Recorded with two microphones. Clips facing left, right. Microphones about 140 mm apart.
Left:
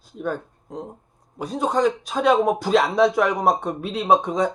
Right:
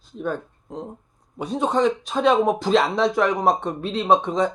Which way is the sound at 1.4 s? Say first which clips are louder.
Even; centre (ahead or behind).